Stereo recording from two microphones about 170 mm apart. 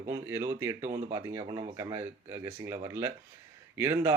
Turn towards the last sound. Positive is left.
turn(degrees=-20)  # may be behind; listen again after turning